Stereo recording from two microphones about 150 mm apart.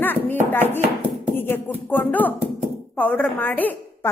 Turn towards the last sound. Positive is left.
turn(degrees=10)  # may be behind; listen again after turning